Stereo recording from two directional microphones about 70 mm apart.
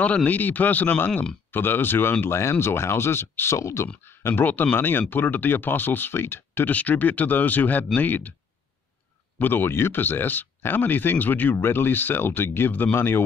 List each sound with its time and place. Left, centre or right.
0.0 s speech: centre
9.4 s speech: left